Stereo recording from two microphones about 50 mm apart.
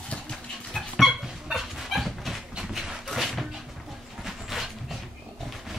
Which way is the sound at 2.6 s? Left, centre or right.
Centre.